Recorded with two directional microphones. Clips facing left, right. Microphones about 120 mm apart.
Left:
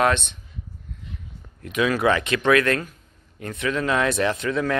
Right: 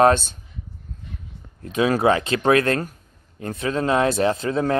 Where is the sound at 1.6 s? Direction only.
30° right (ahead or behind).